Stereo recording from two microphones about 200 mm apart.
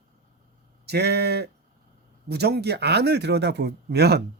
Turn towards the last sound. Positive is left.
turn(degrees=-55)  # may be behind; listen again after turning